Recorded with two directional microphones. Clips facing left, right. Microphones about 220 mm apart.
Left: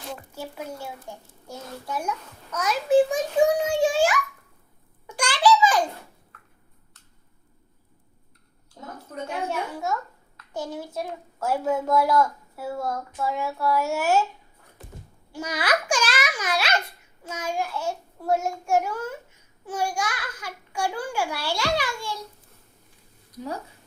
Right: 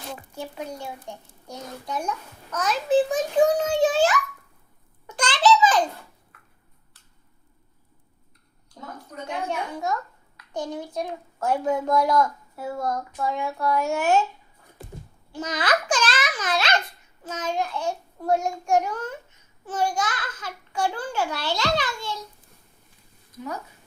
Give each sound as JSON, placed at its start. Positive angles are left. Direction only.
{"t": 1.1, "sound": "a child's voice", "side_deg": 5}
{"t": 1.5, "sound": "a child's voice", "side_deg": -20}
{"t": 2.0, "sound": "a child's voice", "side_deg": 10}
{"t": 5.0, "sound": "a sound", "side_deg": 10}
{"t": 9.5, "sound": "a child's voice", "side_deg": 5}
{"t": 15.3, "sound": "a child's voice", "side_deg": 10}
{"t": 23.3, "sound": "speech", "side_deg": 35}